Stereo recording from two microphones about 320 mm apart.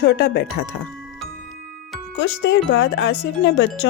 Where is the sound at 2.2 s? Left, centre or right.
Left.